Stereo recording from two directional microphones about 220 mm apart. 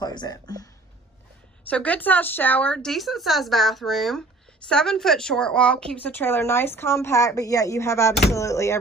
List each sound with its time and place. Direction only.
0.0 s a woman's voice: 20° left (ahead or behind)